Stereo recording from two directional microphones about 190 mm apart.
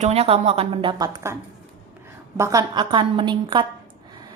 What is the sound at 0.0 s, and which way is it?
A woman's voice, 30° right (ahead or behind).